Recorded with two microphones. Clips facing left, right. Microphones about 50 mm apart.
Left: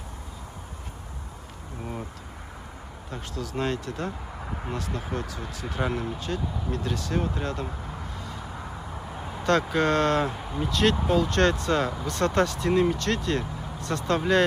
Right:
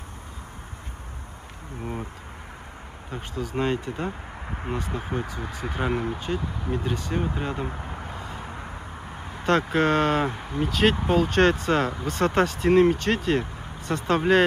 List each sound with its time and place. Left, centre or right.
3.1 s speech: centre
10.3 s speech: right